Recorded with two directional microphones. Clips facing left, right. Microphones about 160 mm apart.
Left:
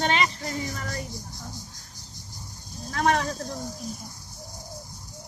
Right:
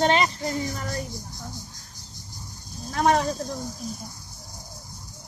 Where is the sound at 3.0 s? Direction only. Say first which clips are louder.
Right 3 dB; 30° right (ahead or behind).